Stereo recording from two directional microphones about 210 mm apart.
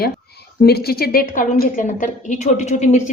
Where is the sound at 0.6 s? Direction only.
50° left (ahead or behind).